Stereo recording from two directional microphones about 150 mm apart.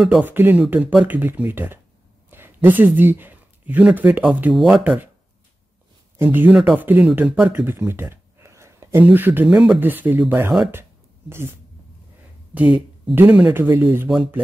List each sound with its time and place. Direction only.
0.0 s speech: 10° right (ahead or behind)
6.1 s speech: 15° right (ahead or behind)
10.7 s a sound: 15° right (ahead or behind)
13.1 s speech: 15° right (ahead or behind)